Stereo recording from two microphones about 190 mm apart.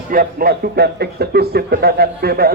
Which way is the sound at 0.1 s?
50° right (ahead or behind).